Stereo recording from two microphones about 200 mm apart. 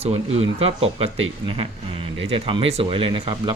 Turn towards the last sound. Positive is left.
turn(degrees=-25)  # may be behind; listen again after turning